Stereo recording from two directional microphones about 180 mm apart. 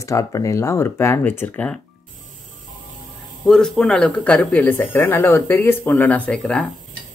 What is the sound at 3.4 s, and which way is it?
Speech, 5° left (ahead or behind).